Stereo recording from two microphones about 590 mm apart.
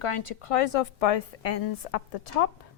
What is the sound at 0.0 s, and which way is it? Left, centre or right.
A woman's voice, left.